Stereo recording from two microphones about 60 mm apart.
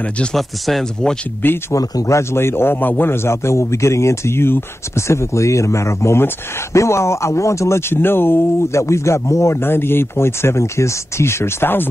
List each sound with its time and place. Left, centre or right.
0.3 s speech: centre
1.7 s speech: left
2.1 s a man's voice: left
3.3 s speech: left
7.9 s a man's voice: left
8.7 s speech: left
9.6 s speech: left